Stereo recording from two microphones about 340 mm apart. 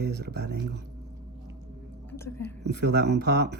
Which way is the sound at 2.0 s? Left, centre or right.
Centre.